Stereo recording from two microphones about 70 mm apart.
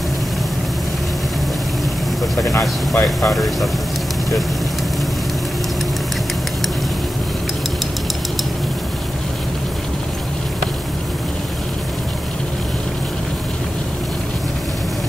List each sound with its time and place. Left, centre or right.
2.9 s speech: left
3.3 s speech: centre